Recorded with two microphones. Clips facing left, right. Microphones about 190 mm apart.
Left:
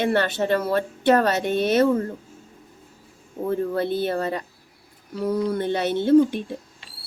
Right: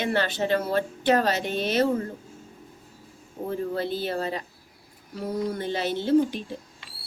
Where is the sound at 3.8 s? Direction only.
55° left (ahead or behind).